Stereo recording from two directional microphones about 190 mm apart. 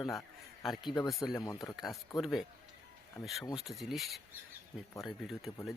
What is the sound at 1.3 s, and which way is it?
Speech, 20° left (ahead or behind).